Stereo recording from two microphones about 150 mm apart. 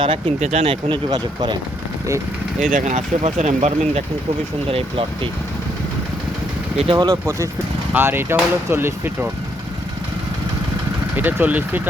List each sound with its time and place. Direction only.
0.0 s speech: 35° right (ahead or behind)
0.3 s speech: 50° right (ahead or behind); by 1.5 s 30° right (ahead or behind)
2.6 s speech: 60° right (ahead or behind)
4.7 s speech: 35° right (ahead or behind)
6.9 s speech: 25° right (ahead or behind)
11.2 s speech: 10° right (ahead or behind)